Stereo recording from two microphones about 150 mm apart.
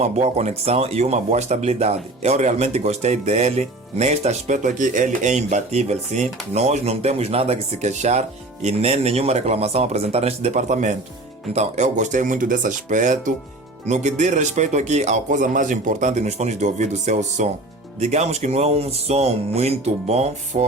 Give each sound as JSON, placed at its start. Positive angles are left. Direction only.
{"t": 0.0, "sound": "speech", "side_deg": -45}